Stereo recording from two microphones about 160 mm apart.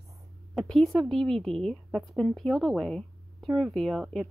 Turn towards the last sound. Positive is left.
turn(degrees=0)  # may be behind; listen again after turning